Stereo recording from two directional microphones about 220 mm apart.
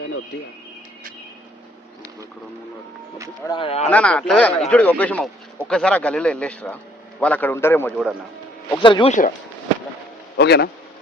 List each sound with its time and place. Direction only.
3.5 s speech: 25° left (ahead or behind)
3.8 s a man's voice: 5° left (ahead or behind)
8.7 s speech: 20° left (ahead or behind)
10.3 s speech: 50° left (ahead or behind)